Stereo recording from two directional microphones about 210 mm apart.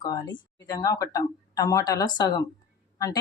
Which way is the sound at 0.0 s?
20° left (ahead or behind).